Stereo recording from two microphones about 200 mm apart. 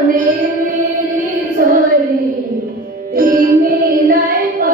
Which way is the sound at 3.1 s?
45° right (ahead or behind).